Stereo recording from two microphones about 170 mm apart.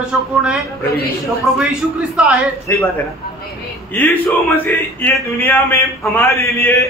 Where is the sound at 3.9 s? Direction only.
15° left (ahead or behind).